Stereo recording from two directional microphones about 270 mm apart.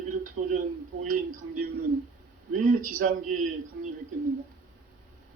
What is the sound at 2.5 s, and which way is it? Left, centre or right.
Speech, right.